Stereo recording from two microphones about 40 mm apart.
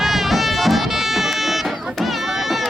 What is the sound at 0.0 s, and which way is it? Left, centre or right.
Music, centre.